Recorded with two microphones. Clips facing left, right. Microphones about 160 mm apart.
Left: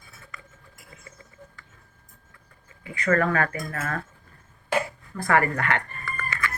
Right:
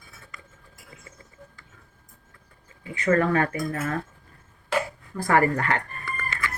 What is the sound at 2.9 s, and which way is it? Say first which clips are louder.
Speech: right 1 dB; 25° right (ahead or behind).